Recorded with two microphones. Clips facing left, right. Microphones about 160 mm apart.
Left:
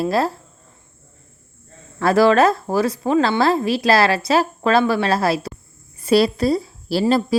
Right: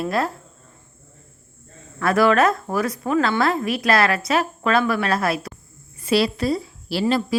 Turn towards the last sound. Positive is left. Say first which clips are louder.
# left 3 dB
turn(degrees=40)  # may be behind; listen again after turning